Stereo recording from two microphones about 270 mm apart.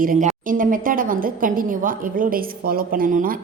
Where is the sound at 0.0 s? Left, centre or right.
Right.